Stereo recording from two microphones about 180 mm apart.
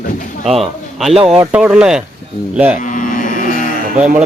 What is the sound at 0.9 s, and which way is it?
A man's voice, centre (ahead or behind).